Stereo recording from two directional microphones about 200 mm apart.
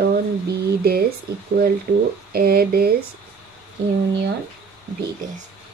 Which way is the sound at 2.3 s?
50° right (ahead or behind).